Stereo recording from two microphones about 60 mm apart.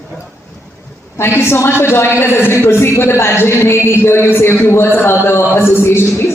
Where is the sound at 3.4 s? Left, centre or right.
Left.